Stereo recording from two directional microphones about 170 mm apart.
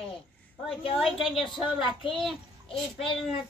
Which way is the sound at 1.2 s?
Centre (ahead or behind).